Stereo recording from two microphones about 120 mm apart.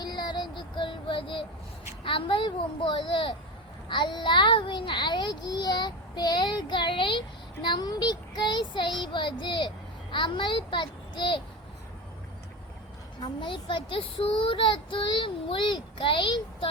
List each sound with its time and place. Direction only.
0.0 s child singing: 35° left (ahead or behind)
2.0 s a child's voice: 45° left (ahead or behind)
13.2 s speech: 40° left (ahead or behind)